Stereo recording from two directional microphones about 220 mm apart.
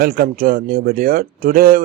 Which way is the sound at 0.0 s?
40° right (ahead or behind).